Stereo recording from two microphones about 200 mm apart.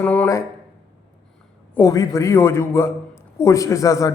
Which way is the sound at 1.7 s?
15° left (ahead or behind).